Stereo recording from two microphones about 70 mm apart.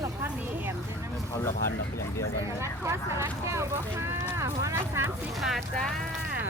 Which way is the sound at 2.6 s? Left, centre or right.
Right.